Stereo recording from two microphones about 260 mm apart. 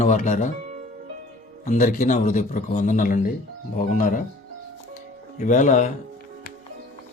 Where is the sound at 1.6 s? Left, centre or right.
Left.